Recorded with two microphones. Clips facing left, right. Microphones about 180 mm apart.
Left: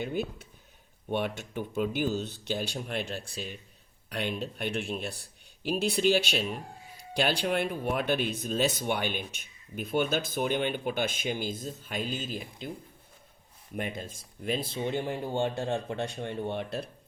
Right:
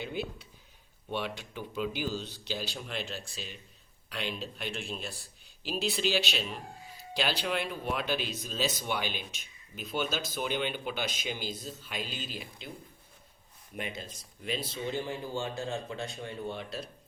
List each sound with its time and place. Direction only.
0.0 s speech: 45° left (ahead or behind)
13.7 s speech: 50° left (ahead or behind)